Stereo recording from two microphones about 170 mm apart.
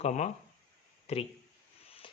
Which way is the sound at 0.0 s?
45° left (ahead or behind).